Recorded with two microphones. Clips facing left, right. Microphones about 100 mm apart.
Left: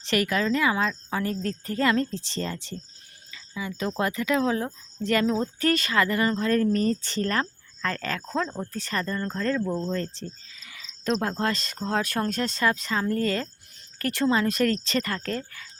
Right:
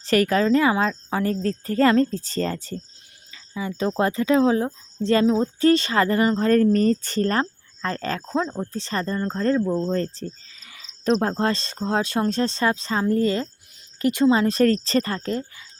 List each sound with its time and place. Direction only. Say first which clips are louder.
0.0 s speech: right 6 dB; 40° right (ahead or behind)
3.3 s speech: right 4 dB; 30° right (ahead or behind)
8.4 s speech: right 3 dB; 15° right (ahead or behind)
8.7 s speech: right 3 dB; 25° right (ahead or behind)
14.4 s speech: right 5 dB; 35° right (ahead or behind)